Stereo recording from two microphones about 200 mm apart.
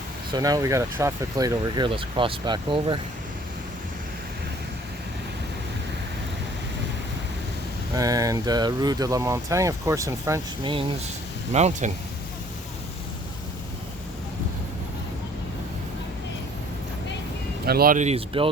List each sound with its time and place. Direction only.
0.3 s speech: 20° right (ahead or behind)
7.9 s speech: 20° right (ahead or behind)
11.5 s speech: 35° right (ahead or behind)
17.7 s speech: 45° right (ahead or behind); by 18.5 s 30° right (ahead or behind)